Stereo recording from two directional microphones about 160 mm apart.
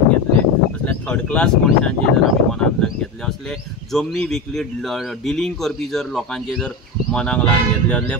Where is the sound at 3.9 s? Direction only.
Centre (ahead or behind).